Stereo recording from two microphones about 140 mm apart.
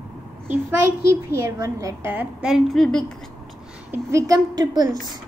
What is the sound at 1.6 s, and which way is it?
Speech, 25° right (ahead or behind).